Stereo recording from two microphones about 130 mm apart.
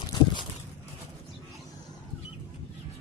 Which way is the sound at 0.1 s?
35° left (ahead or behind).